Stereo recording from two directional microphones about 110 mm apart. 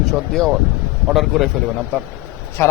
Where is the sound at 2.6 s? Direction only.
20° left (ahead or behind).